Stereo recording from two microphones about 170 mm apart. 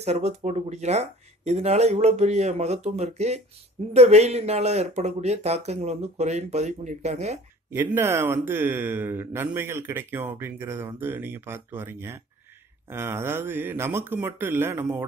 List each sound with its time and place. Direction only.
0.0 s speech: 40° right (ahead or behind)
7.7 s speech: 15° right (ahead or behind)